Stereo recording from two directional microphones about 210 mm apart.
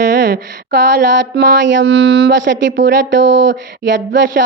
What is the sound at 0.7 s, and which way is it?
Speech, 55° right (ahead or behind).